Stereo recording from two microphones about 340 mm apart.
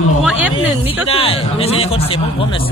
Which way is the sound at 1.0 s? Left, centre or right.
Centre.